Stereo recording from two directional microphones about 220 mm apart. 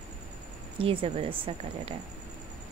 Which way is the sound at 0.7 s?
25° right (ahead or behind).